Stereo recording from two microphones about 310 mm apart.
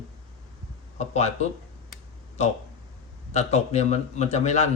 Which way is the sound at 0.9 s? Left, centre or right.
Left.